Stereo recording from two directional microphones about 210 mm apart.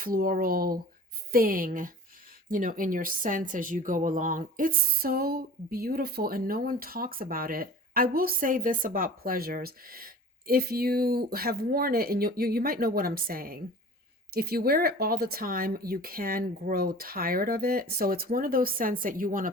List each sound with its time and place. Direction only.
0.0 s a woman's voice: 40° right (ahead or behind)